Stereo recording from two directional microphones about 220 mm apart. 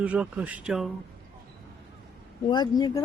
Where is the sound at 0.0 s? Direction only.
5° right (ahead or behind).